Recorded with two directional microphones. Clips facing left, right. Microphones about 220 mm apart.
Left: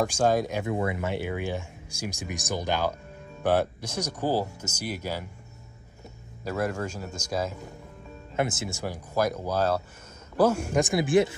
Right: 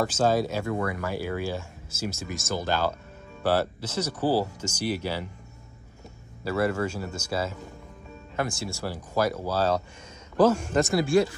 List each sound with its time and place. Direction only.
0.0 s speech: 15° left (ahead or behind)
6.4 s a man's voice: 5° right (ahead or behind)
8.4 s speech: 20° left (ahead or behind)